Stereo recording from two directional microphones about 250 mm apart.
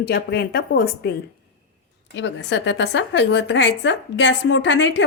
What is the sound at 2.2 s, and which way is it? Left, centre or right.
A woman's voice, left.